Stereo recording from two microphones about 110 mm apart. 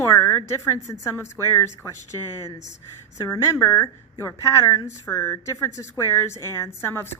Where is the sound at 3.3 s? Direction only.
25° left (ahead or behind).